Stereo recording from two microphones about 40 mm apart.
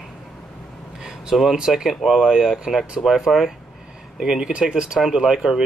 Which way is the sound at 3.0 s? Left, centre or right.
Left.